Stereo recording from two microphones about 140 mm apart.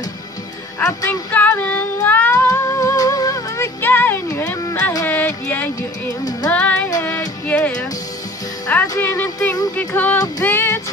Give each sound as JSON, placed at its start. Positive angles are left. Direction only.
{"t": 0.7, "sound": "child singing", "side_deg": 10}
{"t": 2.4, "sound": "music", "side_deg": 25}